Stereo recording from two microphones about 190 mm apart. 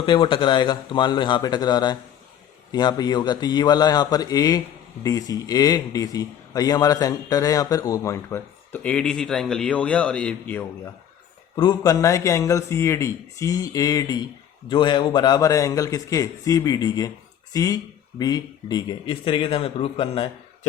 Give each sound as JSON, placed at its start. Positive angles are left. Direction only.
{"t": 0.0, "sound": "a man's voice", "side_deg": 25}
{"t": 11.5, "sound": "a man's voice", "side_deg": 20}